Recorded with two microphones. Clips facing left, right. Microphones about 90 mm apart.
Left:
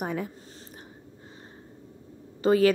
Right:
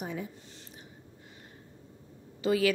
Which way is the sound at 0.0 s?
60° left (ahead or behind).